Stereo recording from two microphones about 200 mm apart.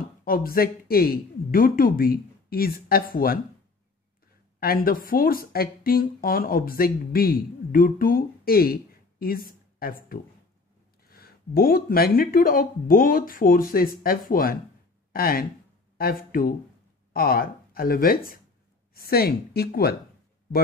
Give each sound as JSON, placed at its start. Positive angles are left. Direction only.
{"t": 0.2, "sound": "speech", "side_deg": 45}
{"t": 4.6, "sound": "speech", "side_deg": 45}